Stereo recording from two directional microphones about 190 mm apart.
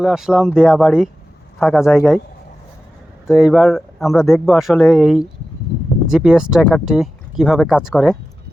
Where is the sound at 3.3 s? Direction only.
Centre (ahead or behind).